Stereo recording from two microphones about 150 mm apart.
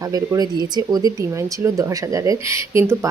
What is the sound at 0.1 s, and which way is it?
Speech, 25° right (ahead or behind).